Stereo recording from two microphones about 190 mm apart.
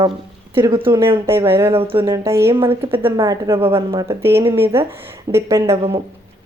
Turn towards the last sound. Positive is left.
turn(degrees=-15)  # may be behind; listen again after turning